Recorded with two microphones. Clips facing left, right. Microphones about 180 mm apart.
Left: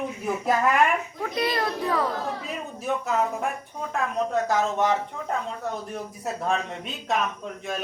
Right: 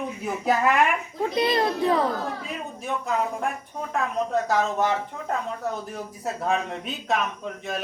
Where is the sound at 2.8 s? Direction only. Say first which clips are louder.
Left 2 dB; centre (ahead or behind).